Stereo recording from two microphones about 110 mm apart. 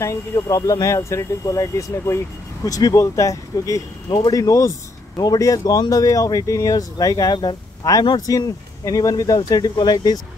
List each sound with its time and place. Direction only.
0.0 s speech: 30° left (ahead or behind)